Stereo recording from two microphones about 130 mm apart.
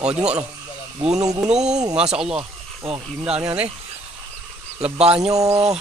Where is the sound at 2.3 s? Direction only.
45° right (ahead or behind).